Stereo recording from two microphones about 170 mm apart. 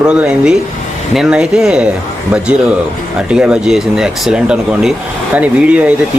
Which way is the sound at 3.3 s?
5° right (ahead or behind).